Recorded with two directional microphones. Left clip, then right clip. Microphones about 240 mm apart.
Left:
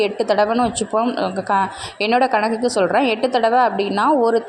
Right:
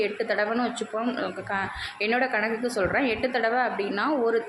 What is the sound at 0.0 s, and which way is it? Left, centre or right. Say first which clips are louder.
A woman's voice: left 9 dB; left.